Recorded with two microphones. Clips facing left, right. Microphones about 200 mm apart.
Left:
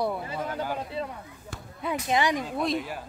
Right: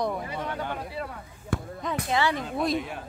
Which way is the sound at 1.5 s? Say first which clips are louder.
Right 13 dB; 55° right (ahead or behind).